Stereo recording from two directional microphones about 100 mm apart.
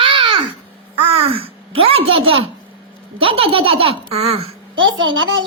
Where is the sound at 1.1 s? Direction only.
65° right (ahead or behind).